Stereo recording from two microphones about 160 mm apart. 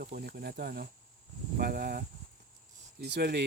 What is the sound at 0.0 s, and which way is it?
Speech, 70° right (ahead or behind).